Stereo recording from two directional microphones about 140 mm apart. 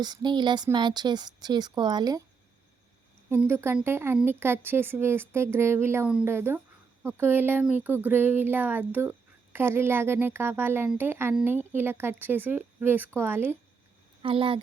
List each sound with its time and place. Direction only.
0.0 s speech: 30° right (ahead or behind)
3.2 s a sound: 15° right (ahead or behind)
14.2 s speech: 40° right (ahead or behind)